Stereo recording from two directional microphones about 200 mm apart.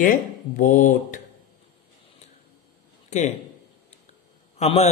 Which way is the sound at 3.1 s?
35° left (ahead or behind).